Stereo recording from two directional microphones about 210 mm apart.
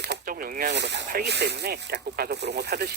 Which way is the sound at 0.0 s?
50° right (ahead or behind).